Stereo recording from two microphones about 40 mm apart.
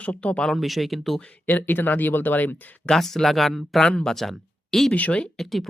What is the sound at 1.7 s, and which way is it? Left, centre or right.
Speech, left.